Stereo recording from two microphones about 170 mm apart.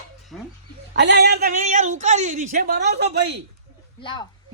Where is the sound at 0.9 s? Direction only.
90° right; by 1.5 s 70° right (ahead or behind).